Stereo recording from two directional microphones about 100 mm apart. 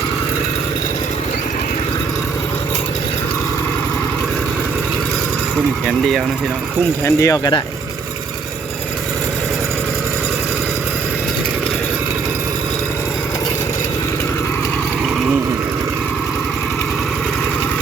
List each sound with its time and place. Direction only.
7.0 s speech: 35° left (ahead or behind)